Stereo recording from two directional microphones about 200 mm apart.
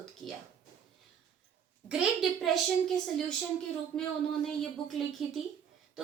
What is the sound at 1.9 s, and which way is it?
A woman's voice, centre (ahead or behind).